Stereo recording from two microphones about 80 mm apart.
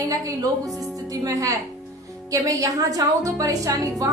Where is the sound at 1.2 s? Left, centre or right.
Right.